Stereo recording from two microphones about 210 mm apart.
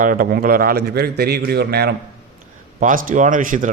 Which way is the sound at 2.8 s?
40° right (ahead or behind).